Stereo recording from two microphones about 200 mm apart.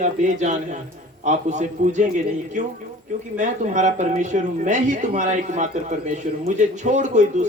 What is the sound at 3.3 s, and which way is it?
Speech, 40° right (ahead or behind).